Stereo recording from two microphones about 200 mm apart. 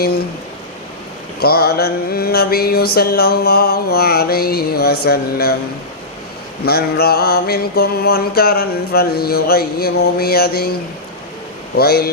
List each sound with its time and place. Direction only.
1.4 s mantra: 50° left (ahead or behind)
6.7 s mantra: 50° left (ahead or behind)
11.8 s mantra: 50° left (ahead or behind)